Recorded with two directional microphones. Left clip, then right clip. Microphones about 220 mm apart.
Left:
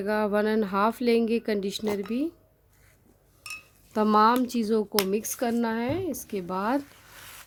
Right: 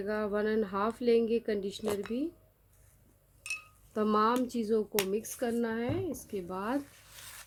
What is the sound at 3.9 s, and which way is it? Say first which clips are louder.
Speech: left 7 dB; 45° left (ahead or behind).